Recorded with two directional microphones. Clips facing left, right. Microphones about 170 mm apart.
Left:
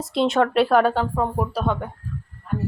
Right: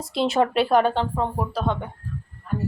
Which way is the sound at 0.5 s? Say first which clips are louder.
Left 2 dB; centre (ahead or behind).